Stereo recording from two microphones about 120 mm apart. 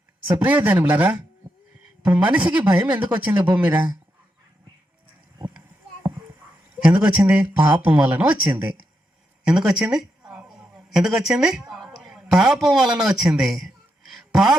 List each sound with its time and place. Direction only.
0.3 s speech: 15° right (ahead or behind)
6.8 s speech: 10° right (ahead or behind)
9.4 s a sound: 5° right (ahead or behind)